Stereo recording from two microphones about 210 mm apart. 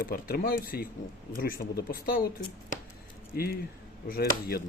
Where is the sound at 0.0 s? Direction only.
45° left (ahead or behind).